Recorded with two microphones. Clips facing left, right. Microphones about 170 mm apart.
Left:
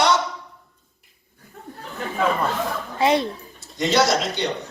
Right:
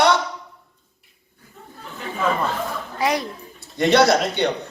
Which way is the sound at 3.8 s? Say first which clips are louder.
Right 4 dB; 60° right (ahead or behind).